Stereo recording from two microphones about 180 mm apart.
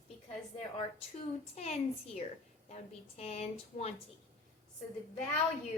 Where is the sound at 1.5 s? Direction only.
35° left (ahead or behind).